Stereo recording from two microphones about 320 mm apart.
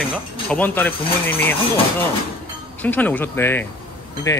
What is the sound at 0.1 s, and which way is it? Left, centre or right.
Speech, centre.